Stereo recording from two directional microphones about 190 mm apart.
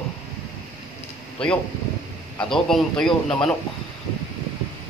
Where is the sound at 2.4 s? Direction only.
Centre (ahead or behind).